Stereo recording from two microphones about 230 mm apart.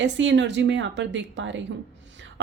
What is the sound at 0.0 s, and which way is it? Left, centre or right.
A woman's voice, right.